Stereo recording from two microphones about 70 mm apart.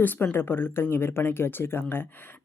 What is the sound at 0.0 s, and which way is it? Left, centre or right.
Speech, left.